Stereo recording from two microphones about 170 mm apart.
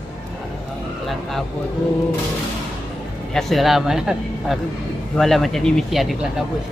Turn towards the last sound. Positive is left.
turn(degrees=0)  # may be behind; listen again after turning